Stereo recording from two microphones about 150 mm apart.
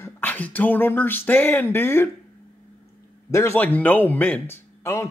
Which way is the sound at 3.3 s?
20° left (ahead or behind).